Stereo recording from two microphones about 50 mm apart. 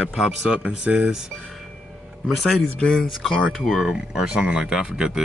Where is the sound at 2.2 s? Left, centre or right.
Centre.